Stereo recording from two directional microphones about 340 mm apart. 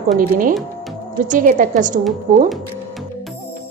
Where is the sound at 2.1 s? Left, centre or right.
Centre.